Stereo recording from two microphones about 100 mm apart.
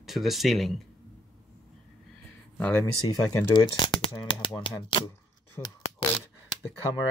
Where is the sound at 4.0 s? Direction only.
60° left (ahead or behind).